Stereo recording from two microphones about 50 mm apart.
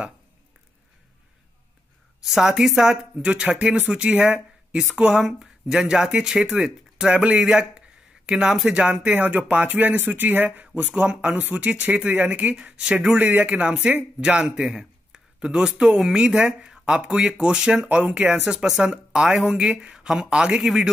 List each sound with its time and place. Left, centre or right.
2.2 s speech: centre
9.6 s speech: right
12.7 s speech: right
17.8 s speech: right
18.4 s speech: centre
20.6 s speech: centre